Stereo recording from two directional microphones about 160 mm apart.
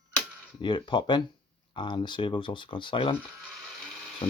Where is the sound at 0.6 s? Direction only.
30° left (ahead or behind).